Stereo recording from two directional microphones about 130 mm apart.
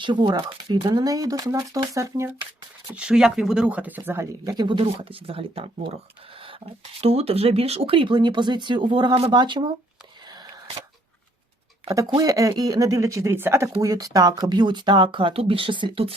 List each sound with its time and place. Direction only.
0.0 s speech: 35° right (ahead or behind); by 2.5 s 20° right (ahead or behind)
2.9 s speech: 10° right (ahead or behind); by 6.0 s 50° right (ahead or behind)
7.0 s speech: 50° right (ahead or behind)
10.3 s wheeze: 30° right (ahead or behind)
11.9 s speech: 30° right (ahead or behind)